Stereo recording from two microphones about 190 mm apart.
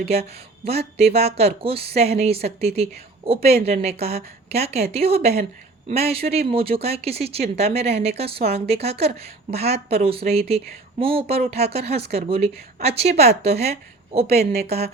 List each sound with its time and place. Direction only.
0.0 s speech: 30° right (ahead or behind)